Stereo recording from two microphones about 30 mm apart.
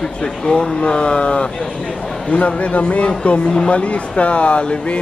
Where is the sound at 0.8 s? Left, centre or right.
Left.